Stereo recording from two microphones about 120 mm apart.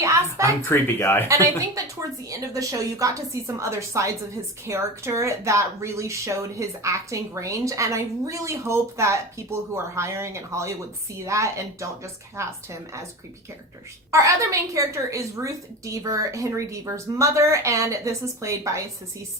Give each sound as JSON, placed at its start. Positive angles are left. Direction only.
{"t": 0.6, "sound": "speech", "side_deg": 20}
{"t": 1.3, "sound": "speech", "side_deg": -25}
{"t": 14.1, "sound": "speech", "side_deg": -25}